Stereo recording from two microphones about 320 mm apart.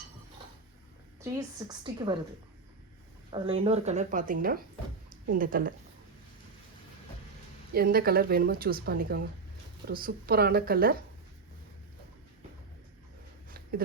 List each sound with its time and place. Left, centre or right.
1.2 s a woman's voice: centre
3.4 s a woman's voice: centre
7.7 s a woman's voice: right
13.5 s a sound: right